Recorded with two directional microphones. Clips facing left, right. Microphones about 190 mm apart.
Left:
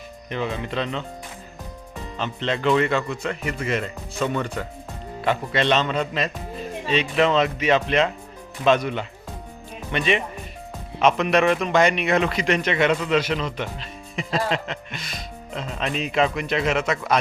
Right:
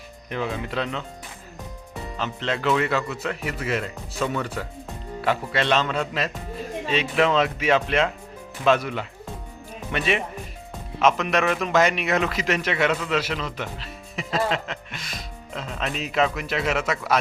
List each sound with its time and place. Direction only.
0.3 s a man's voice: 5° right (ahead or behind)
2.1 s a man's voice: 5° right (ahead or behind)